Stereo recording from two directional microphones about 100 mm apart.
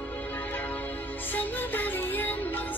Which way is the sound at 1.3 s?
20° left (ahead or behind).